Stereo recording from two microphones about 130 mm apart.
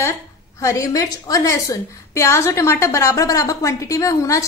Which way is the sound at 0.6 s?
25° left (ahead or behind).